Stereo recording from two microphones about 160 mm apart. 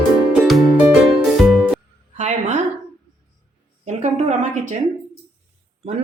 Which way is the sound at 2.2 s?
45° right (ahead or behind).